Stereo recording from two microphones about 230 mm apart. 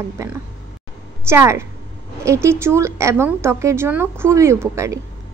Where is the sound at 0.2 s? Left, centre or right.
Centre.